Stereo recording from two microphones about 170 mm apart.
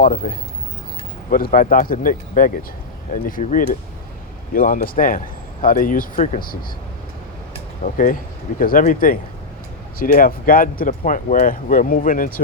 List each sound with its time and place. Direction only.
0.0 s speech: 55° left (ahead or behind)
7.9 s speech: 55° left (ahead or behind)